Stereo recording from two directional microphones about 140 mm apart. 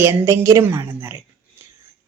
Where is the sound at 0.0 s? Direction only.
15° right (ahead or behind).